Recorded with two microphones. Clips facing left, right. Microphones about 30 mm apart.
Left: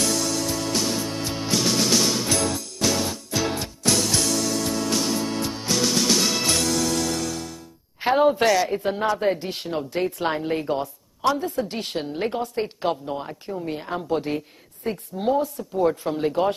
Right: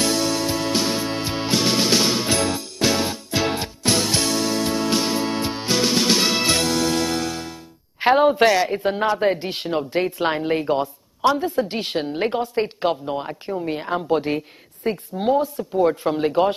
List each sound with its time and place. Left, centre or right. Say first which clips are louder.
0.0 s music: right 3 dB; right
8.1 s a man's voice: right 3 dB; centre